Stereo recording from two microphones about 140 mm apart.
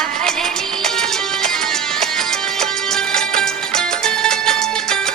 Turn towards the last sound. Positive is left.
turn(degrees=5)  # may be behind; listen again after turning